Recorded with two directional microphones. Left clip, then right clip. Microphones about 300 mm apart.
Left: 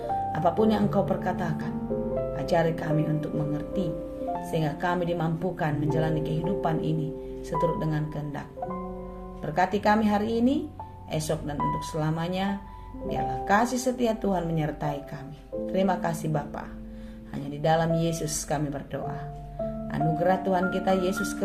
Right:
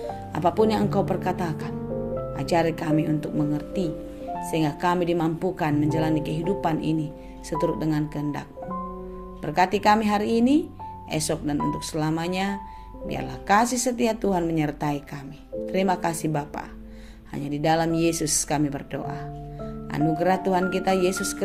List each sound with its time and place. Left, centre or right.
0.3 s a woman's voice: centre